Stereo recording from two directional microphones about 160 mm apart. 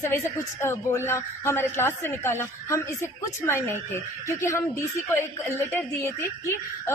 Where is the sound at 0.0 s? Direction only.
15° left (ahead or behind).